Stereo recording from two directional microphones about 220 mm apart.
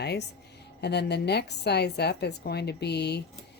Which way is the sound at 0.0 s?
50° left (ahead or behind).